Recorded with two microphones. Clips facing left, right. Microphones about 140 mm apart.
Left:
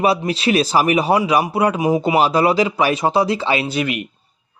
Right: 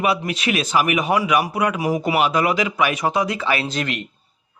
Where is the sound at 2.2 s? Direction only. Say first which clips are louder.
Left 4 dB; 30° left (ahead or behind).